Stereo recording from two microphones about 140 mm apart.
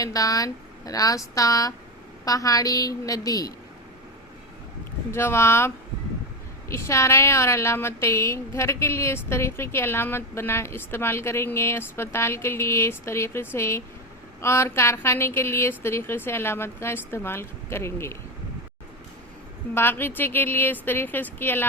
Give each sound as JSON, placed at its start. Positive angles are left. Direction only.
{"t": 0.0, "sound": "a woman's voice", "side_deg": 25}
{"t": 5.1, "sound": "a woman's voice", "side_deg": 20}
{"t": 19.7, "sound": "a woman's voice", "side_deg": 15}